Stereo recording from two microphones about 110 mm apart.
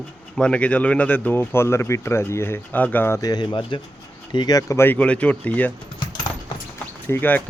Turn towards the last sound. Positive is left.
turn(degrees=20)  # may be behind; listen again after turning